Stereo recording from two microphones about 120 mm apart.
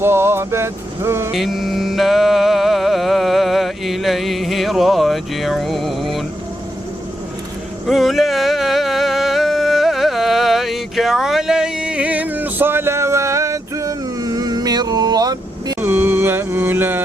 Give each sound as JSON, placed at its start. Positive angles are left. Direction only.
{"t": 0.0, "sound": "vehicle", "side_deg": -20}
{"t": 1.3, "sound": "music", "side_deg": 0}
{"t": 7.9, "sound": "a sound", "side_deg": 0}
{"t": 15.8, "sound": "music", "side_deg": -15}